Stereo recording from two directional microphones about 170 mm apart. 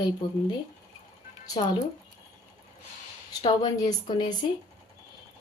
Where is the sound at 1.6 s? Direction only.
30° left (ahead or behind).